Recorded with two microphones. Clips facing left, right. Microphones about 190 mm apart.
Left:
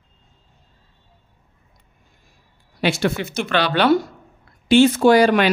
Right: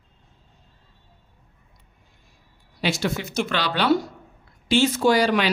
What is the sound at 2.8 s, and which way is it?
Speech, 60° left (ahead or behind).